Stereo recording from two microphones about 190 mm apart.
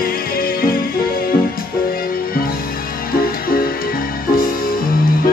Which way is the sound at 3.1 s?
50° left (ahead or behind).